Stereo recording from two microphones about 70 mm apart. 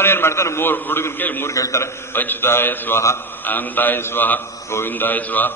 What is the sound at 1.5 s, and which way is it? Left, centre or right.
Speech, left.